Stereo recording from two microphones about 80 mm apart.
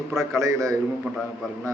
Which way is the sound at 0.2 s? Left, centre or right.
Right.